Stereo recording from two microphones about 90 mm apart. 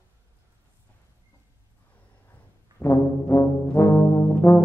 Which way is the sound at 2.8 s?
35° left (ahead or behind).